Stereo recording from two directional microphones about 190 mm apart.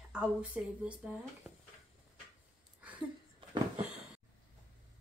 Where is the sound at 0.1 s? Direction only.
5° right (ahead or behind).